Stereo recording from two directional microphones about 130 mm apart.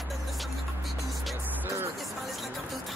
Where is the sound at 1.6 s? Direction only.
15° right (ahead or behind).